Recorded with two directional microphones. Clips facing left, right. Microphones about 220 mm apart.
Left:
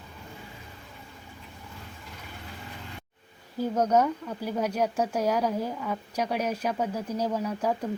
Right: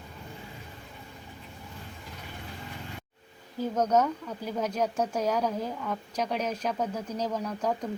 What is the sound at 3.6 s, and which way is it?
Speech, 10° left (ahead or behind).